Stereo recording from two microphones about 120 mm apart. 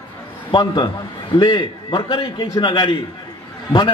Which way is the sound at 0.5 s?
40° left (ahead or behind).